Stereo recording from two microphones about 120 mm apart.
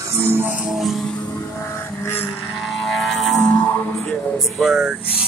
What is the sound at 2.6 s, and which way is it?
Vehicle, centre (ahead or behind).